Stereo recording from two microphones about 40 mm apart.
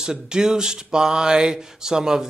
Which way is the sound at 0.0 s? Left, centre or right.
Centre.